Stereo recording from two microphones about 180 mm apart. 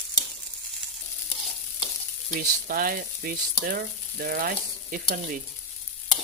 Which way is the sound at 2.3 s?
50° right (ahead or behind).